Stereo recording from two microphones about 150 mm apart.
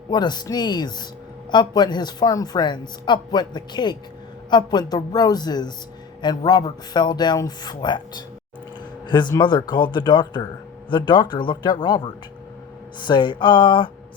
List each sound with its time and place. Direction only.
0.1 s a man's voice: 30° left (ahead or behind)